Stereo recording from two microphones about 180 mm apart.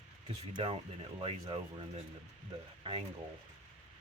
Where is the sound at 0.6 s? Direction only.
30° right (ahead or behind).